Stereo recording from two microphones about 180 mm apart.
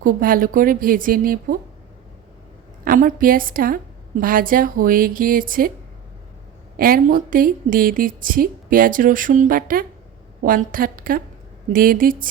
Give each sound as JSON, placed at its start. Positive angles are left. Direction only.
{"t": 0.0, "sound": "a woman's voice", "side_deg": -50}
{"t": 2.8, "sound": "a woman's voice", "side_deg": -50}
{"t": 6.7, "sound": "a woman's voice", "side_deg": -55}